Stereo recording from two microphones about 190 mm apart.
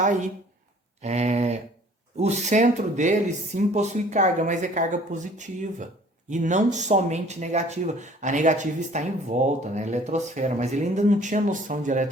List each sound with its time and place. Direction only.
0.0 s speech: 40° right (ahead or behind)